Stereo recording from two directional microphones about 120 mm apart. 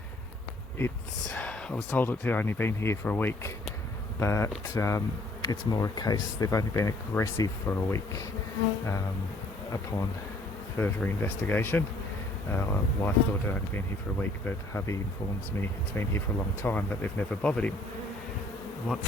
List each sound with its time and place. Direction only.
1.3 s speech: 10° left (ahead or behind)
9.7 s speech: 25° left (ahead or behind); by 17.7 s 10° left (ahead or behind)